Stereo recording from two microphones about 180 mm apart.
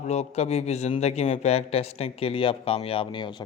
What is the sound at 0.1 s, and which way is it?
Speech, 35° left (ahead or behind).